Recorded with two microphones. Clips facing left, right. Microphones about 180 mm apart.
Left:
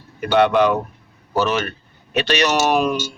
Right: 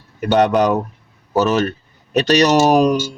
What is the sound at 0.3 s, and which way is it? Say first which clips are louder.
Speech: right 1 dB; 40° right (ahead or behind).